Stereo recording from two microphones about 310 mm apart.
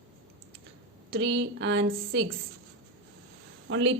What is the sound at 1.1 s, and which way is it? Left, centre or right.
Speech, right.